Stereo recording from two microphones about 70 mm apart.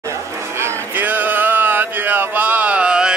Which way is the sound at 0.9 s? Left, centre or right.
Right.